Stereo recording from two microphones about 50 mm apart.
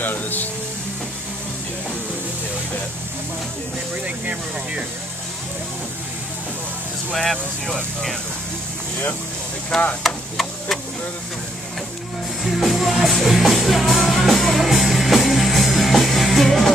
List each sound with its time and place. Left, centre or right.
0.0 s speech: left
7.2 s speech: centre
9.7 s speech: centre
10.0 s tick-tock: centre
12.5 s music: centre